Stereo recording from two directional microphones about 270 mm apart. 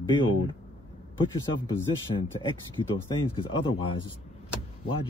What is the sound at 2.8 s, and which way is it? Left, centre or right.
Speech, centre.